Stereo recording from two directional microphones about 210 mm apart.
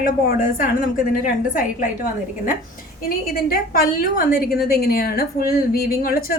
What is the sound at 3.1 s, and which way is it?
A woman's voice, 45° left (ahead or behind).